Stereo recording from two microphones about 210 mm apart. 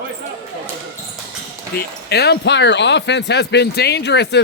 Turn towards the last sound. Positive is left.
turn(degrees=55)  # may be behind; listen again after turning